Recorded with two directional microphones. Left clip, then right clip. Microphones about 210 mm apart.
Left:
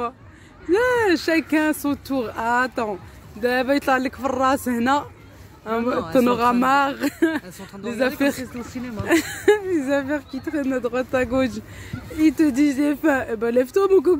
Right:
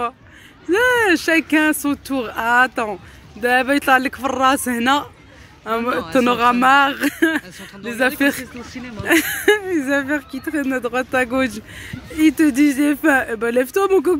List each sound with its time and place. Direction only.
0.7 s speech: centre (ahead or behind)
8.5 s speech: 50° left (ahead or behind)
9.0 s speech: centre (ahead or behind)